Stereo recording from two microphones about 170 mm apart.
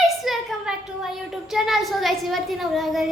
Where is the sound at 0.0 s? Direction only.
Centre (ahead or behind).